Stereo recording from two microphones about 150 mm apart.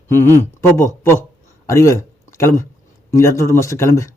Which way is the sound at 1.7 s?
20° left (ahead or behind).